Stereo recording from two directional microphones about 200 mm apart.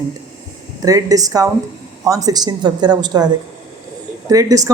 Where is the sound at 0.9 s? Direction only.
15° right (ahead or behind).